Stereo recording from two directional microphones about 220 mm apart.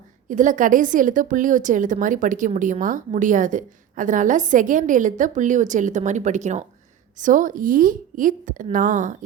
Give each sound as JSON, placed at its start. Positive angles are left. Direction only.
{"t": 0.3, "sound": "a woman's voice", "side_deg": -35}